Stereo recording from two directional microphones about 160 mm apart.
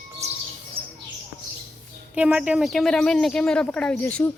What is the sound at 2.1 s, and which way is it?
Speech, 10° right (ahead or behind).